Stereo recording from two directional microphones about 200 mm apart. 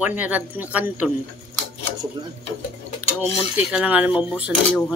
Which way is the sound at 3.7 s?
5° right (ahead or behind).